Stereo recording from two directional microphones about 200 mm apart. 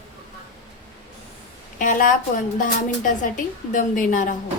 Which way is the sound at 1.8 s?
40° left (ahead or behind).